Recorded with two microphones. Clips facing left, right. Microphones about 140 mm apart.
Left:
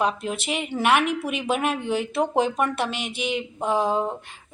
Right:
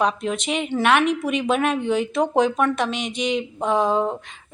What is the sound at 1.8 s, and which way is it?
Speech, 65° right (ahead or behind).